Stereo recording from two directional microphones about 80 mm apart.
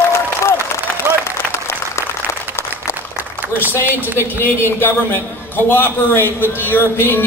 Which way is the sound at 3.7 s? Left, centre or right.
Left.